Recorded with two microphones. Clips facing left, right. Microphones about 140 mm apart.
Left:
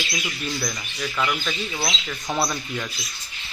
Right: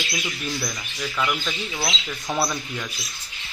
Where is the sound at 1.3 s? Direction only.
Centre (ahead or behind).